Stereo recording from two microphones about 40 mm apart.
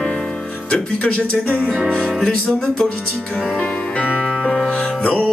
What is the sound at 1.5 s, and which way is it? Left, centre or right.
Music, right.